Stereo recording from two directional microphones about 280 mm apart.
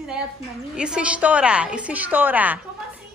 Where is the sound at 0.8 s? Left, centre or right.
Centre.